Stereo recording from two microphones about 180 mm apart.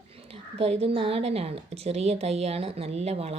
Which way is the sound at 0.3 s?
35° right (ahead or behind).